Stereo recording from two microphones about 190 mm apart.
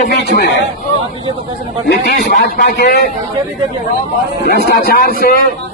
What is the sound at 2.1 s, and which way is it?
Speech, 55° left (ahead or behind).